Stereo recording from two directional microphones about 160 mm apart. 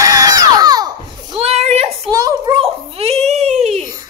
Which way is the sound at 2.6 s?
40° right (ahead or behind).